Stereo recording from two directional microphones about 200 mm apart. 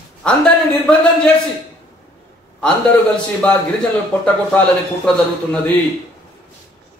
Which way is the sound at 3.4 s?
5° left (ahead or behind).